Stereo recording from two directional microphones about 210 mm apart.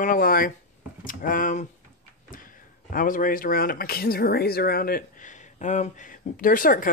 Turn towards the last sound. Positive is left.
turn(degrees=40)  # may be behind; listen again after turning